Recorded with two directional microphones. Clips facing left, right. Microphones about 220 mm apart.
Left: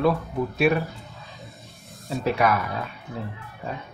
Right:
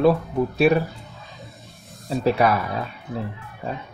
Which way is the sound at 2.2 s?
35° right (ahead or behind).